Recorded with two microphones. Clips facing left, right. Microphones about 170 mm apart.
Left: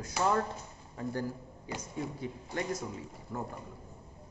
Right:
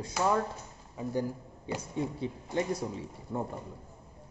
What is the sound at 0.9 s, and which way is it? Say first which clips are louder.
A man's voice: right 3 dB; 15° right (ahead or behind).